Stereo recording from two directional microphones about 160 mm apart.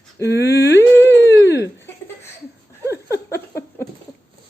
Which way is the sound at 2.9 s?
20° left (ahead or behind).